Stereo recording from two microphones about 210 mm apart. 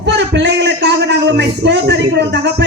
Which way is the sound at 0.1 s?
55° right (ahead or behind).